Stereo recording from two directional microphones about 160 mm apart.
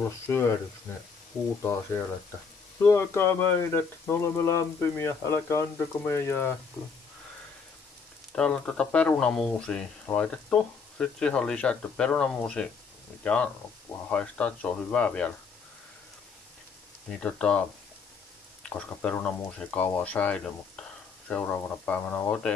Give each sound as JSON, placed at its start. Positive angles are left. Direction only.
{"t": 1.6, "sound": "speech", "side_deg": 15}
{"t": 8.4, "sound": "speech", "side_deg": 5}
{"t": 17.1, "sound": "speech", "side_deg": 5}